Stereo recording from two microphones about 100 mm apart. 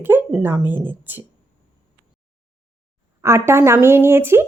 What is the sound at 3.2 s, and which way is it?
Speech, 30° right (ahead or behind).